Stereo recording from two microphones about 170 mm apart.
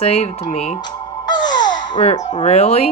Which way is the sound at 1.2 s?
25° left (ahead or behind).